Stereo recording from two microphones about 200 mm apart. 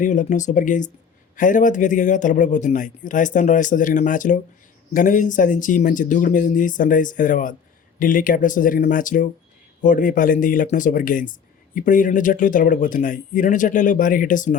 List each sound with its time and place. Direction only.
0.0 s speech: 40° left (ahead or behind)